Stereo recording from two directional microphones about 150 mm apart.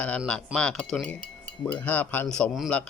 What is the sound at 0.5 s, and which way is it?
Cutlery, 5° left (ahead or behind).